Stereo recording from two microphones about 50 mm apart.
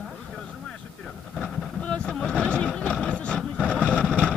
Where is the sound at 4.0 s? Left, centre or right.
Centre.